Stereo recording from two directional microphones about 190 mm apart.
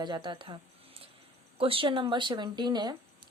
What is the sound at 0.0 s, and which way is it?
Speech, 25° right (ahead or behind).